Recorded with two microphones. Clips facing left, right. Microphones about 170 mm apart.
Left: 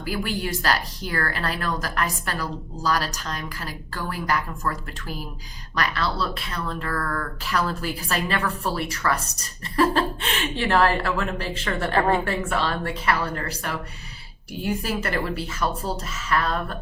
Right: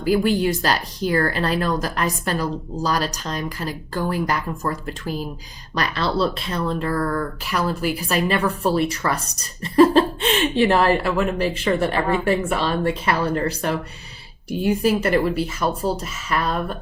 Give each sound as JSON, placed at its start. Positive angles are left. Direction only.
{"t": 0.0, "sound": "a woman's voice", "side_deg": -20}